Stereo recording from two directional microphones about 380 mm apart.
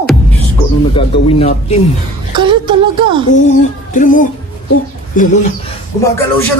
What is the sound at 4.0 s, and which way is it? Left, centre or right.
Speech, left.